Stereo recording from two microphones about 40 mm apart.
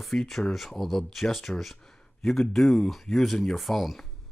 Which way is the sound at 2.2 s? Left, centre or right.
Centre.